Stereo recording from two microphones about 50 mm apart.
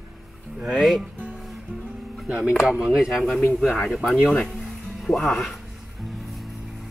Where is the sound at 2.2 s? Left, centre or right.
Right.